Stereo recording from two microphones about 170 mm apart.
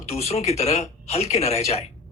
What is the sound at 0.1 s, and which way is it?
Speech, 40° left (ahead or behind).